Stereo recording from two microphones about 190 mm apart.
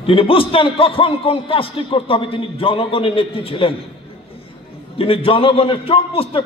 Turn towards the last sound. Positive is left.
turn(degrees=30)  # may be behind; listen again after turning